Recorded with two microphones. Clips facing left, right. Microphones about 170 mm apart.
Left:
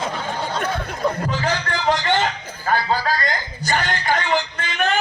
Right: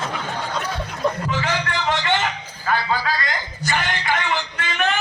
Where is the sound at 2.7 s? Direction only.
45° left (ahead or behind).